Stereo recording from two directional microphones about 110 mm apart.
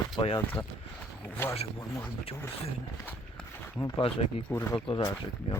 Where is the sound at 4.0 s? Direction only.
60° left (ahead or behind).